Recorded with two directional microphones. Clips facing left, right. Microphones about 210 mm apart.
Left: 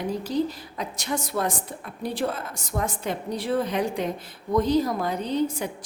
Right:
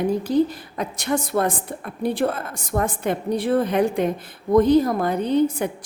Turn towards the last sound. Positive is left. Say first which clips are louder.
# right 6 dB
turn(degrees=-55)  # may be behind; listen again after turning